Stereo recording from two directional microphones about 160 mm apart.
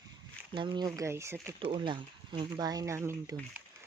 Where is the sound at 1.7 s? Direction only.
30° right (ahead or behind).